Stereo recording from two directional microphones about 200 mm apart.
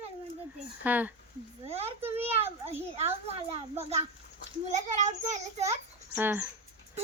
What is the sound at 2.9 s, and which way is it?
A woman's voice, 30° right (ahead or behind).